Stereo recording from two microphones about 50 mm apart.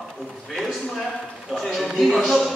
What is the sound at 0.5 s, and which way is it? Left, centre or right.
A man's voice, centre.